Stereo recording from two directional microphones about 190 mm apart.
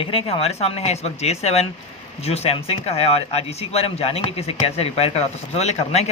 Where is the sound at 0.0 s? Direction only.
30° left (ahead or behind).